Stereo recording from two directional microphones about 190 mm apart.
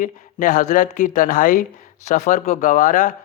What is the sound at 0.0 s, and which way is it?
A man's voice, 45° left (ahead or behind).